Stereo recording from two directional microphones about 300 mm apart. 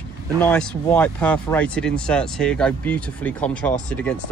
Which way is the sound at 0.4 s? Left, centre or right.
Centre.